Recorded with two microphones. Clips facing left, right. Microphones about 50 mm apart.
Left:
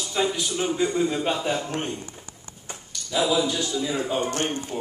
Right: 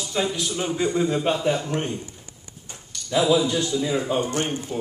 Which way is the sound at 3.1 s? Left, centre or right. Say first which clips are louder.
Right 4 dB; right.